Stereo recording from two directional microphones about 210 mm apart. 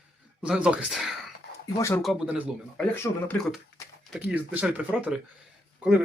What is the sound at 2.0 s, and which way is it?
Speech, centre (ahead or behind).